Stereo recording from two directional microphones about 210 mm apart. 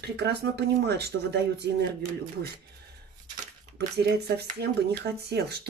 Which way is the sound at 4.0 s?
50° right (ahead or behind).